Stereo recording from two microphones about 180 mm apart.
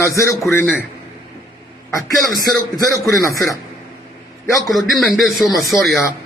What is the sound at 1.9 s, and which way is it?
Speech, 20° left (ahead or behind).